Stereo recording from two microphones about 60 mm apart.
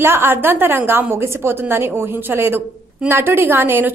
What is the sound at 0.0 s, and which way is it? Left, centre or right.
A woman's voice, right.